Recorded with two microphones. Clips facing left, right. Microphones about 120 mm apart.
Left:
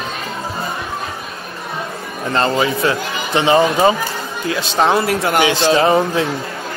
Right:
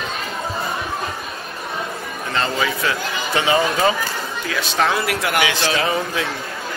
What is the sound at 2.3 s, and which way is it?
Speech, 35° left (ahead or behind).